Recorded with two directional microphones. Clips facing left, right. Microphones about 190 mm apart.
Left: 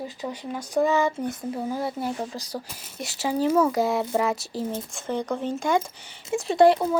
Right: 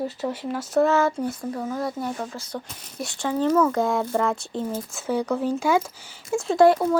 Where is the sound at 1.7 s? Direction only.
30° left (ahead or behind).